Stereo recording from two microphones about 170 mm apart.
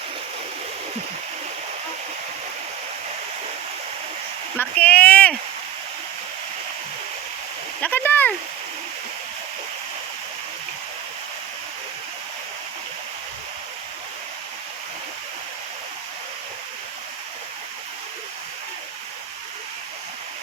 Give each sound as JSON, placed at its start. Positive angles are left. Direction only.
{"t": 4.5, "sound": "speech", "side_deg": 10}
{"t": 7.8, "sound": "speech", "side_deg": 10}